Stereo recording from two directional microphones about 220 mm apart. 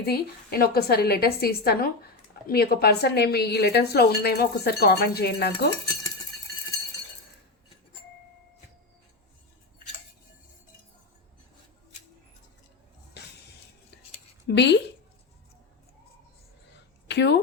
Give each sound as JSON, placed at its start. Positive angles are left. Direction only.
{"t": 0.0, "sound": "speech", "side_deg": 45}
{"t": 14.4, "sound": "speech", "side_deg": 50}
{"t": 17.1, "sound": "speech", "side_deg": 50}